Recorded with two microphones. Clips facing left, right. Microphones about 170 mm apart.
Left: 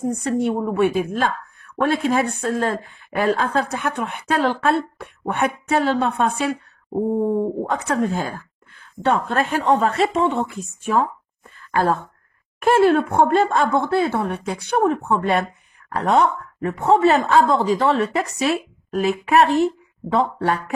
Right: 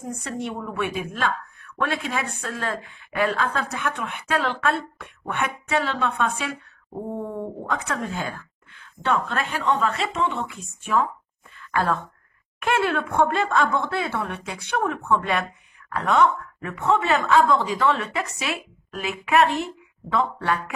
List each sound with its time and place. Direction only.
0.0 s a woman's voice: 40° left (ahead or behind)